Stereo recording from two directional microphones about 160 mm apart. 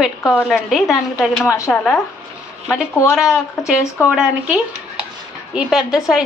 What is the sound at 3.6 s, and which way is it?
A woman's voice, centre (ahead or behind).